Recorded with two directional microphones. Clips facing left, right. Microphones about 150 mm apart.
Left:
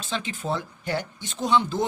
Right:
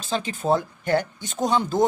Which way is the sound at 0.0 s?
40° right (ahead or behind).